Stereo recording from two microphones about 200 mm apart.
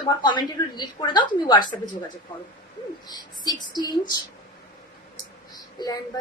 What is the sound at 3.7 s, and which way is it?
Speech, 20° left (ahead or behind).